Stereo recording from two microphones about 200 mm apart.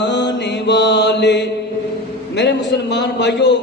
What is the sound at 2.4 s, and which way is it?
A man's voice, 60° left (ahead or behind).